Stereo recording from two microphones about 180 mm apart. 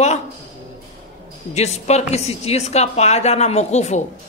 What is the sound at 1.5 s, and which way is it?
A man's voice, 40° left (ahead or behind).